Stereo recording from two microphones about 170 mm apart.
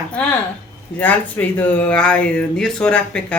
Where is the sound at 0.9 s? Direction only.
10° left (ahead or behind).